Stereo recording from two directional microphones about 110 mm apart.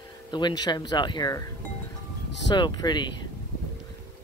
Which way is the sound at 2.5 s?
40° left (ahead or behind).